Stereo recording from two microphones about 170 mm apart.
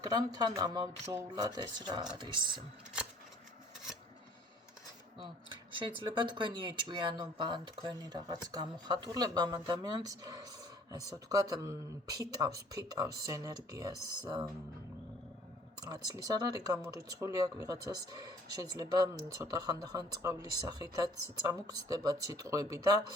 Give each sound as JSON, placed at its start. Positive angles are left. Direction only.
{"t": 0.0, "sound": "speech", "side_deg": -20}
{"t": 5.8, "sound": "speech", "side_deg": -30}
{"t": 15.9, "sound": "speech", "side_deg": -20}